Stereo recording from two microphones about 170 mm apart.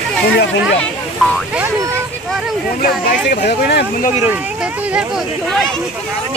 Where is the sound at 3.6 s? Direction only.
70° left (ahead or behind).